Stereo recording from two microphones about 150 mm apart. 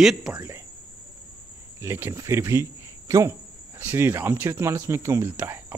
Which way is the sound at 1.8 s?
15° right (ahead or behind).